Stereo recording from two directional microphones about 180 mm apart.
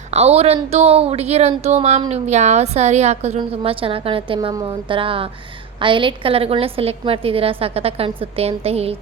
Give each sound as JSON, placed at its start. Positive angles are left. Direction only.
{"t": 0.1, "sound": "a woman's voice", "side_deg": -35}